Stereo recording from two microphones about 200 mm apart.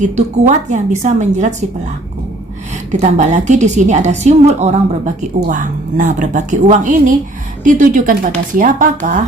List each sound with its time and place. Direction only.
0.0 s a woman's voice: 35° right (ahead or behind)
2.9 s a woman's voice: 35° right (ahead or behind)